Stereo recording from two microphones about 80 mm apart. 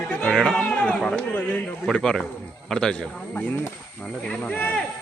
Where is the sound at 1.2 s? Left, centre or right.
Centre.